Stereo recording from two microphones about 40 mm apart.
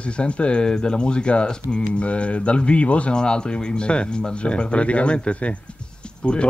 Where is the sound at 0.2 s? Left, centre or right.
Left.